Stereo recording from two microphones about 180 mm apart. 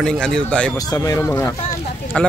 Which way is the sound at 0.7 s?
20° left (ahead or behind).